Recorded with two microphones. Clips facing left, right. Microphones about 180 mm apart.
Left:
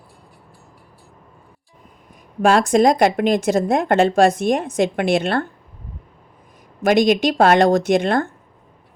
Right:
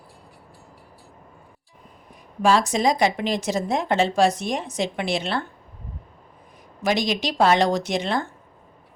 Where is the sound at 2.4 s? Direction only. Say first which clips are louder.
Left 5 dB; 55° left (ahead or behind).